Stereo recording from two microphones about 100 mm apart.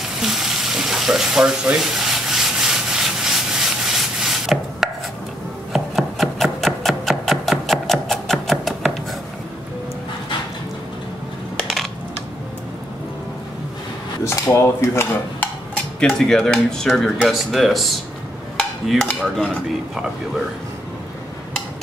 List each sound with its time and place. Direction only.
0.2 s frying: 5° right (ahead or behind)
5.7 s rub: centre (ahead or behind)
14.2 s dishes: 30° left (ahead or behind)
16.0 s speech: 5° left (ahead or behind)
18.6 s a sound: 5° left (ahead or behind)